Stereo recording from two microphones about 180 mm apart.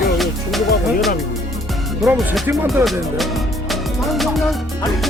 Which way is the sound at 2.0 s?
Centre (ahead or behind).